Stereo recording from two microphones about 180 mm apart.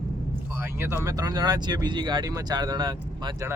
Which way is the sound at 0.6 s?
15° right (ahead or behind).